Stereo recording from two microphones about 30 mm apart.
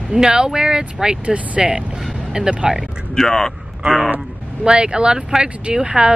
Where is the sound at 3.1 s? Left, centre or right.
Centre.